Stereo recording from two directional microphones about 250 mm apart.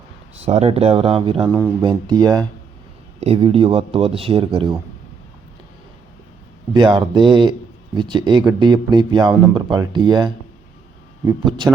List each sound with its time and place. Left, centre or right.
0.4 s speech: right
6.7 s speech: centre